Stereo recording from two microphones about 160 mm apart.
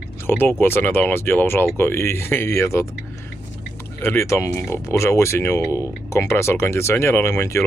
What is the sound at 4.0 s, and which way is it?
Speech, 15° left (ahead or behind).